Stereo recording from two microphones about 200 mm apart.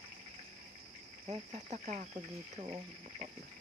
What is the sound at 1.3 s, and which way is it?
Speech, 35° right (ahead or behind).